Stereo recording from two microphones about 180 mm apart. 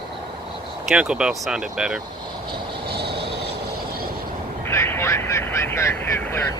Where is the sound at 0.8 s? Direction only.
5° right (ahead or behind).